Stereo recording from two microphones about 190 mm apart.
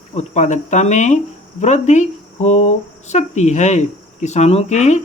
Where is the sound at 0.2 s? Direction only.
40° left (ahead or behind).